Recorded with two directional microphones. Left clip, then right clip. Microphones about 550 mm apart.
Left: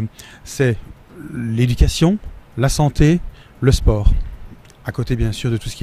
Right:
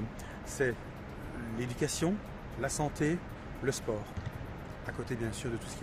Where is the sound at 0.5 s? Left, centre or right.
Left.